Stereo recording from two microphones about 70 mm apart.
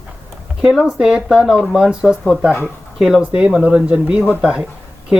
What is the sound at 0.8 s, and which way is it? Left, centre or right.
Speech, centre.